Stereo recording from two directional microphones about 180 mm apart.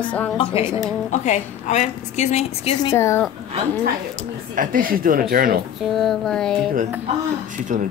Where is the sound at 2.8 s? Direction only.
15° left (ahead or behind).